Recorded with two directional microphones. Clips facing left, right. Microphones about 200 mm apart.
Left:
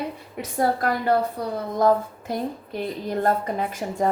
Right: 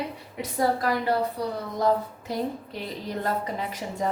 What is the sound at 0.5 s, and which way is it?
Speech, 50° left (ahead or behind).